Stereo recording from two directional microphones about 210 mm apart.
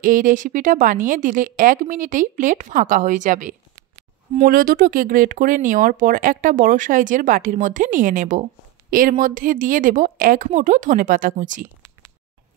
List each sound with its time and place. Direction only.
0.0 s speech: 40° right (ahead or behind)